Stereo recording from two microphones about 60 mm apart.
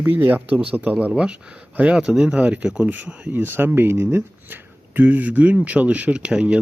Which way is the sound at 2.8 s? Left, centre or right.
Right.